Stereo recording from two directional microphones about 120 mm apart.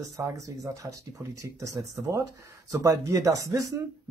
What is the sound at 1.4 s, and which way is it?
Speech, 25° right (ahead or behind).